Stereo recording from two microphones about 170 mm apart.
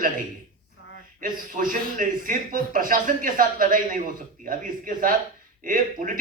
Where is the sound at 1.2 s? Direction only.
55° right (ahead or behind).